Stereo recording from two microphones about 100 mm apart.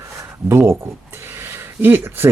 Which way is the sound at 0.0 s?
25° right (ahead or behind).